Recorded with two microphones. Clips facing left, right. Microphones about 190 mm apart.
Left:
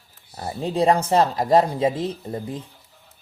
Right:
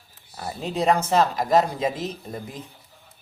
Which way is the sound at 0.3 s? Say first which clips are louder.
Left 4 dB; 30° left (ahead or behind).